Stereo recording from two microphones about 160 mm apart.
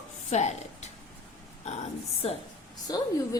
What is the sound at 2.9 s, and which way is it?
Speech, 25° left (ahead or behind).